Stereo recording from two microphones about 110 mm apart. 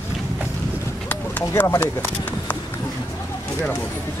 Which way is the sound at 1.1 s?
15° left (ahead or behind).